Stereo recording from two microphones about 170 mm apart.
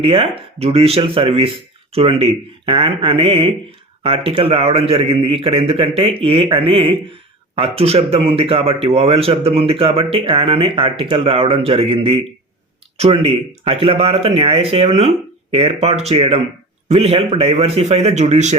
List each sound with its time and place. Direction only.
0.0 s speech: 35° right (ahead or behind)